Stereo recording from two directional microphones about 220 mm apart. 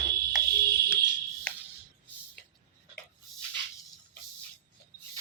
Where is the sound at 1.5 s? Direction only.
5° left (ahead or behind).